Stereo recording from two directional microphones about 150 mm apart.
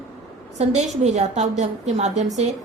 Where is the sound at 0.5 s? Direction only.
50° right (ahead or behind).